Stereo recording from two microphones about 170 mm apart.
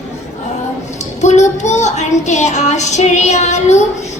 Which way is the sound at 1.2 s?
45° left (ahead or behind).